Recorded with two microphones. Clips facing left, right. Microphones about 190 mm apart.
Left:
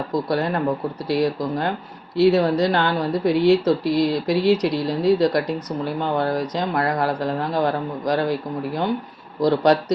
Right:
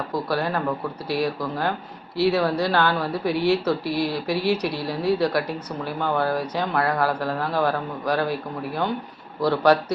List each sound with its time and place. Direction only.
0.3 s speech: 20° left (ahead or behind)